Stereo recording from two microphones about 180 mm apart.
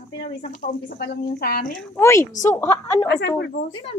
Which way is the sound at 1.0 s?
55° left (ahead or behind).